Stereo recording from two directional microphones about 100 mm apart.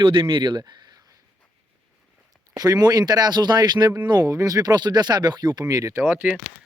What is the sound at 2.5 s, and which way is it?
A man's voice, 40° right (ahead or behind).